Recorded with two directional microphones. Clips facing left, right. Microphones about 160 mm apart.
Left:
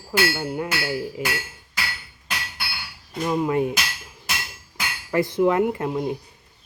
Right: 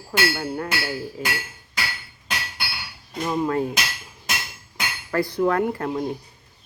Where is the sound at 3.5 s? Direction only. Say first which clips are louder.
Left 2 dB; 15° left (ahead or behind).